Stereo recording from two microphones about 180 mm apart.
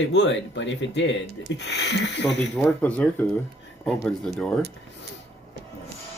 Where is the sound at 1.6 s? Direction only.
75° left (ahead or behind).